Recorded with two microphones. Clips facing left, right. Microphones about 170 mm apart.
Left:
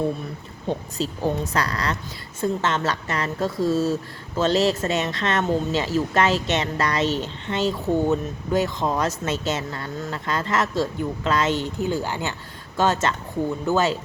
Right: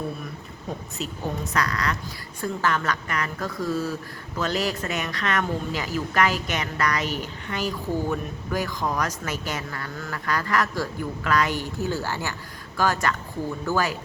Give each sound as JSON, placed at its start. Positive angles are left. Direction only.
{"t": 0.7, "sound": "speech", "side_deg": 30}